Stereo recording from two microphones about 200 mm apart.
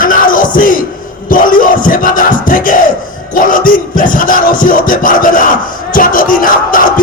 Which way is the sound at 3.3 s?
45° left (ahead or behind).